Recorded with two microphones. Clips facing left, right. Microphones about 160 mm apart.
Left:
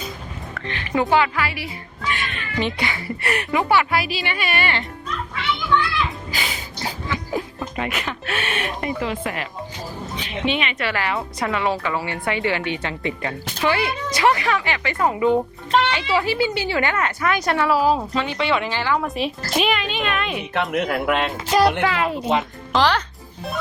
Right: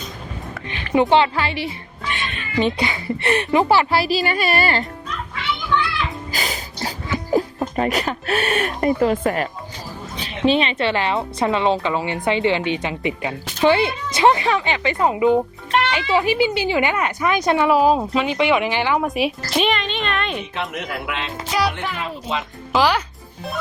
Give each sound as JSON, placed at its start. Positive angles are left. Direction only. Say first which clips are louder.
{"t": 0.9, "sound": "a woman's voice", "louder": "right 3 dB", "side_deg": -25}
{"t": 6.3, "sound": "a sound", "louder": "right 2 dB", "side_deg": -40}
{"t": 7.3, "sound": "a woman's voice", "louder": "right 10 dB", "side_deg": -40}
{"t": 19.5, "sound": "a woman's voice", "louder": "even", "side_deg": 5}
{"t": 20.5, "sound": "speech", "louder": "left 5 dB", "side_deg": 60}
{"t": 21.8, "sound": "speech", "louder": "left 6 dB", "side_deg": 80}
{"t": 22.7, "sound": "a woman's voice", "louder": "right 1 dB", "side_deg": -10}